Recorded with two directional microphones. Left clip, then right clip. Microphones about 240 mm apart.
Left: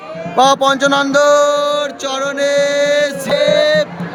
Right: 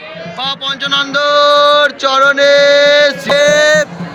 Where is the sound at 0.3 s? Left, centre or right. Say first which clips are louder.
Left 8 dB; left; by 3.8 s centre.